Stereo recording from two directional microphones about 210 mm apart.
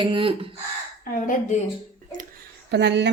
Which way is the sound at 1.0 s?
40° left (ahead or behind).